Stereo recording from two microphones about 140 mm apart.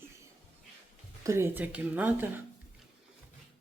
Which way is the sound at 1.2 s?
20° right (ahead or behind).